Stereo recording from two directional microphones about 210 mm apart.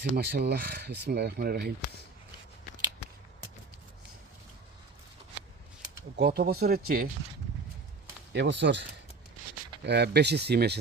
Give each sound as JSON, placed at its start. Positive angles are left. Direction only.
{"t": 0.0, "sound": "speech", "side_deg": -50}
{"t": 6.1, "sound": "speech", "side_deg": -50}
{"t": 8.3, "sound": "speech", "side_deg": -55}